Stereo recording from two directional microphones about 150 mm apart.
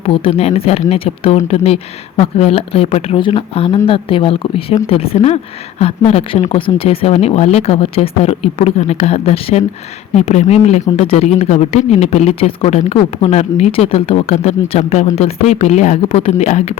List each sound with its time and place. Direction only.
0.0 s speech: 40° left (ahead or behind)